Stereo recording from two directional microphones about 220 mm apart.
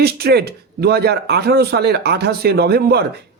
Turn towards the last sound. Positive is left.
turn(degrees=-50)  # may be behind; listen again after turning